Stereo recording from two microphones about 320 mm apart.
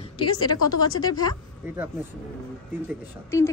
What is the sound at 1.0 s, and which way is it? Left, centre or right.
Speech, centre.